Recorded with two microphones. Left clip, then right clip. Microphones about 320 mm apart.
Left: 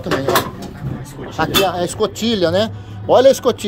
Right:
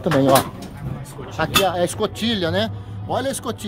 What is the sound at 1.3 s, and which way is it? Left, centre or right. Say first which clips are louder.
Speech: left 3 dB; centre.